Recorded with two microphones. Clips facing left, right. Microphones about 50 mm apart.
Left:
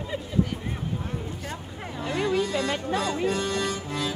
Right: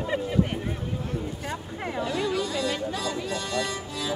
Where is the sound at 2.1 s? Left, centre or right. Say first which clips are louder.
Left 5 dB; left.